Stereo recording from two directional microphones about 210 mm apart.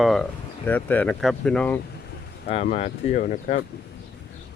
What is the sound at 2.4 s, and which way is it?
Speech, 30° left (ahead or behind).